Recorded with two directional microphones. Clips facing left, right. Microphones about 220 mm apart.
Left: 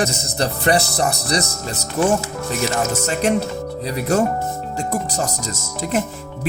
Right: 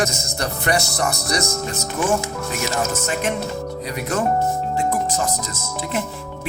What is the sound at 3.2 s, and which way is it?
Speech, 35° left (ahead or behind).